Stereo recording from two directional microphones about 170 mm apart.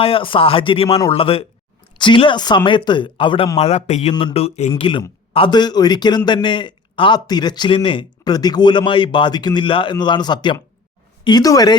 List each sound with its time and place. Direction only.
0.0 s a man's voice: 30° left (ahead or behind)
4.1 s a man's voice: 30° left (ahead or behind)